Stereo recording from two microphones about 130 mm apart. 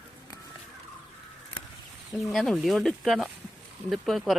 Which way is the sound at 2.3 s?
Centre (ahead or behind).